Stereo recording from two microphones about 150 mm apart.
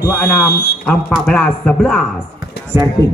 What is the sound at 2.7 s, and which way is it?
Speech, 15° right (ahead or behind).